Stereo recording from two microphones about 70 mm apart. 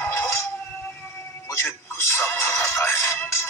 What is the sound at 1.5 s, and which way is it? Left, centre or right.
Speech, left.